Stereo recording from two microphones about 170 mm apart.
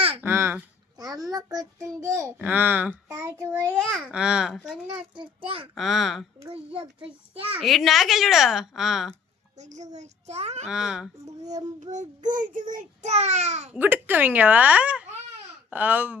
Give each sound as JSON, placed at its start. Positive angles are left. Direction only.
{"t": 0.2, "sound": "a sound", "side_deg": -15}
{"t": 1.3, "sound": "a child's voice", "side_deg": -20}
{"t": 3.7, "sound": "a woman's voice", "side_deg": 0}
{"t": 4.9, "sound": "a child's voice", "side_deg": -30}
{"t": 5.7, "sound": "a woman's voice", "side_deg": 0}
{"t": 6.5, "sound": "a child's voice", "side_deg": -35}
{"t": 7.6, "sound": "a woman's voice", "side_deg": 0}
{"t": 9.6, "sound": "a woman's voice", "side_deg": -45}
{"t": 10.7, "sound": "a woman's voice", "side_deg": -5}
{"t": 11.8, "sound": "a child's voice", "side_deg": -45}
{"t": 13.7, "sound": "a child's voice", "side_deg": -10}